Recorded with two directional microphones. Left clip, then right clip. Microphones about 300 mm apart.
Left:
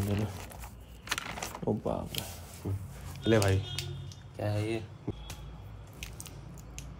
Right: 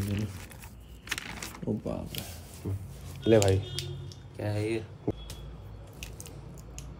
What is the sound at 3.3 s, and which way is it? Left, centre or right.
Speech, centre.